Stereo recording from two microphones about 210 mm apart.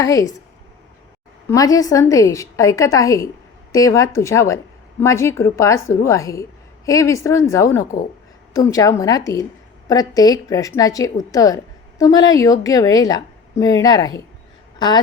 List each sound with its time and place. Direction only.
0.0 s a woman's voice: 15° left (ahead or behind)
1.5 s a woman's voice: 15° left (ahead or behind)